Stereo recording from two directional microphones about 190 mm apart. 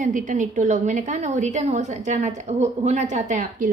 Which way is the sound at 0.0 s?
40° right (ahead or behind).